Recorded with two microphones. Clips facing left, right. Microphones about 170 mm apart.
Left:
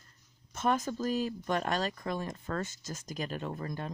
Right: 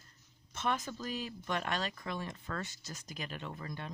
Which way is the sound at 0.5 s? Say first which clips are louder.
Left 6 dB; 45° left (ahead or behind).